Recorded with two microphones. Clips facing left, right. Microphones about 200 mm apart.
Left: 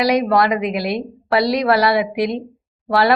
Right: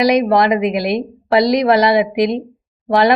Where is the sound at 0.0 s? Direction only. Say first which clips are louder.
Right 3 dB; 20° right (ahead or behind).